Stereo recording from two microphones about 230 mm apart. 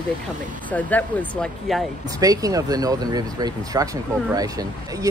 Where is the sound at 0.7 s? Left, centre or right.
Centre.